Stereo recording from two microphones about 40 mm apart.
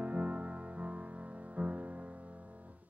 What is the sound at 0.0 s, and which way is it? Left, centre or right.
Music, right.